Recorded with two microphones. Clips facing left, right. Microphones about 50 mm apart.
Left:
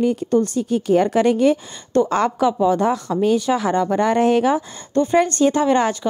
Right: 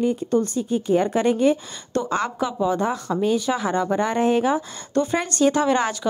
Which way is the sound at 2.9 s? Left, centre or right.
Right.